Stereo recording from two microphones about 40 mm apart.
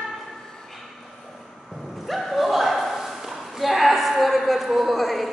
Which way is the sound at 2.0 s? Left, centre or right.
Centre.